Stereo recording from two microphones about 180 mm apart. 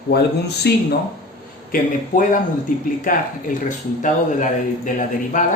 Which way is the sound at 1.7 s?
45° left (ahead or behind).